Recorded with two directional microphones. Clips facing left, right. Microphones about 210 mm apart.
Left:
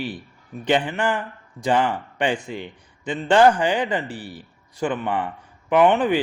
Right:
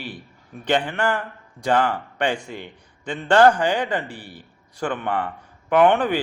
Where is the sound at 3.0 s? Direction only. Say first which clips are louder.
Even; 10° left (ahead or behind).